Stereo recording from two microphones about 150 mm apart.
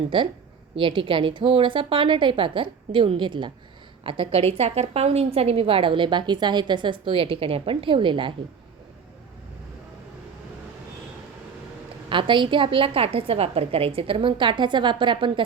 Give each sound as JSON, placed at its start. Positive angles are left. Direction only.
{"t": 0.1, "sound": "a woman's voice", "side_deg": -35}
{"t": 12.0, "sound": "a woman's voice", "side_deg": -35}